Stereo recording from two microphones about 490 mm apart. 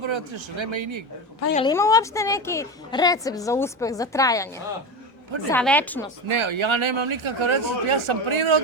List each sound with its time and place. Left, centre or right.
0.0 s speech: right
1.5 s a woman's voice: centre
6.2 s speech: right